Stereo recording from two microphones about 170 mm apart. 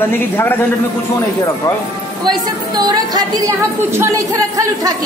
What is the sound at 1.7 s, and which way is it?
Speech, 20° left (ahead or behind).